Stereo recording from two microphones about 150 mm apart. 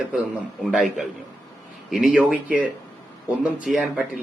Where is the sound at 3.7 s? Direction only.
5° right (ahead or behind).